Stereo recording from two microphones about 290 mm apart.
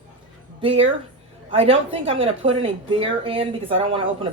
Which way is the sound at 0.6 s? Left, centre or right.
Centre.